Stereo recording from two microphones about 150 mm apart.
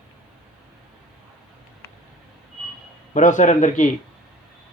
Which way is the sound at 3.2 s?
55° left (ahead or behind).